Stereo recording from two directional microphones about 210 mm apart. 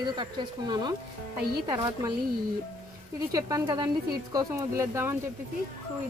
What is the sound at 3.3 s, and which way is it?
Speech, 15° right (ahead or behind).